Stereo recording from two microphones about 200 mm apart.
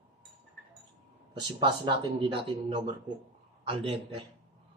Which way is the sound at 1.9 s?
25° right (ahead or behind).